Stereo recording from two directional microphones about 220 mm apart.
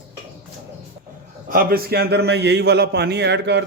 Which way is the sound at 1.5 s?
40° right (ahead or behind).